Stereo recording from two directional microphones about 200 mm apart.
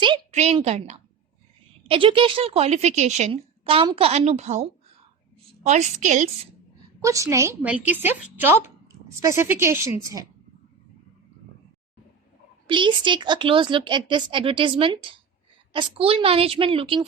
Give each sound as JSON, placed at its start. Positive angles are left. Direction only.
{"t": 0.0, "sound": "a sound", "side_deg": -30}
{"t": 1.9, "sound": "a woman's voice", "side_deg": -25}
{"t": 7.0, "sound": "a woman's voice", "side_deg": -15}
{"t": 12.6, "sound": "a woman's voice", "side_deg": -25}